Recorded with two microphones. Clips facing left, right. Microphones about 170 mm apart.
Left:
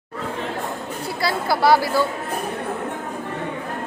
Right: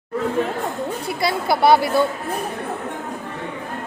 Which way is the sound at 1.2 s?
20° right (ahead or behind).